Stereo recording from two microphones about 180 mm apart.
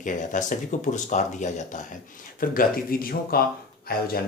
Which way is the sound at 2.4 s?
50° left (ahead or behind).